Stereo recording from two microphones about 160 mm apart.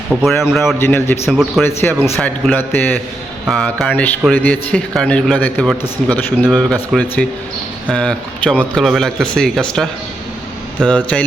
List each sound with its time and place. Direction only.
0.1 s speech: centre (ahead or behind)
0.8 s speech: 15° left (ahead or behind)
1.3 s speech: centre (ahead or behind)
1.6 s speech: 15° left (ahead or behind)